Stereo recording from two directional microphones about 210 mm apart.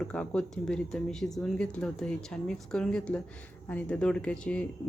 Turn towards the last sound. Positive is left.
turn(degrees=5)  # may be behind; listen again after turning